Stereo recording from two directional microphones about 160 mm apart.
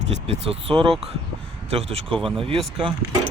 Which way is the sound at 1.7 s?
40° right (ahead or behind).